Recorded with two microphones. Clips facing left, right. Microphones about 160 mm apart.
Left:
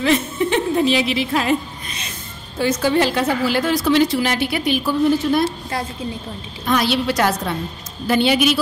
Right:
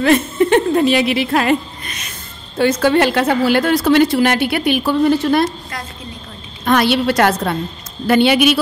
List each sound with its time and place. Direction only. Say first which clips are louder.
0.0 s a woman's voice: right 5 dB; 55° right (ahead or behind)
2.6 s a woman's voice: right 4 dB; 65° right (ahead or behind)
6.6 s a woman's voice: right 4 dB; 65° right (ahead or behind)